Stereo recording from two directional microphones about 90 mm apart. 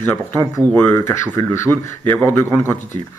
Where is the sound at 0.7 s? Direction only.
20° left (ahead or behind).